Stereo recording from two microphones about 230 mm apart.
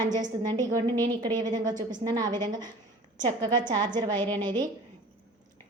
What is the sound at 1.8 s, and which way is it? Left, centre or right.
Speech, right.